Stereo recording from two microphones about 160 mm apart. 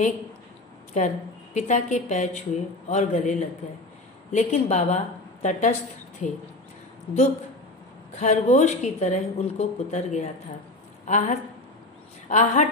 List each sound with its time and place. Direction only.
0.9 s a woman's voice: 45° left (ahead or behind)
8.2 s a woman's voice: 50° left (ahead or behind)